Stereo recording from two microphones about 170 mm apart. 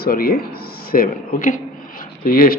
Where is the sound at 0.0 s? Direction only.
60° left (ahead or behind).